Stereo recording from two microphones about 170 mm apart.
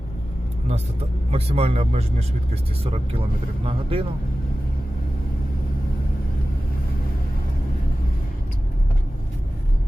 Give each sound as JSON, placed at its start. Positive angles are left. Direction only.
{"t": 0.7, "sound": "speech", "side_deg": -35}